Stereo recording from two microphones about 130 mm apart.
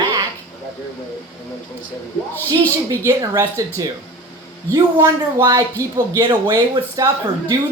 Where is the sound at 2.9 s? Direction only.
25° right (ahead or behind).